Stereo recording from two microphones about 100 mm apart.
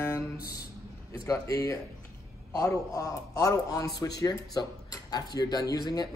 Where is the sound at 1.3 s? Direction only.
35° left (ahead or behind).